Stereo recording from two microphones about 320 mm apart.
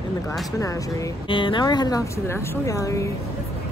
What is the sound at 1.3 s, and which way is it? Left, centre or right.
Speech, centre.